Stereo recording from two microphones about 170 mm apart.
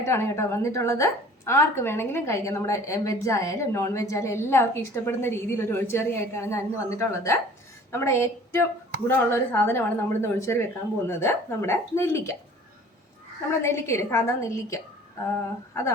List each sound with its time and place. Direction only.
0.0 s a woman's voice: 15° left (ahead or behind)
13.6 s a woman's voice: 15° left (ahead or behind)